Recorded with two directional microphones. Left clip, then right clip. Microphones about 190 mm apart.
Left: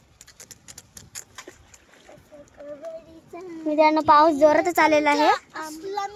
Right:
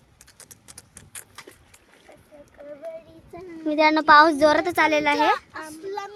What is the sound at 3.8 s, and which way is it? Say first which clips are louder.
Speech: right 2 dB; 5° right (ahead or behind).